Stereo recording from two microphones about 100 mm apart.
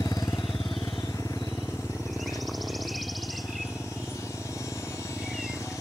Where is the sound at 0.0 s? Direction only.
40° left (ahead or behind).